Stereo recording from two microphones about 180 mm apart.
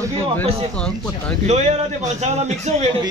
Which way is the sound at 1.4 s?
40° right (ahead or behind).